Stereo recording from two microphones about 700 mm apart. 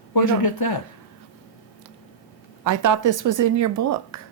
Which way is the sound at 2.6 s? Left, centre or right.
Right.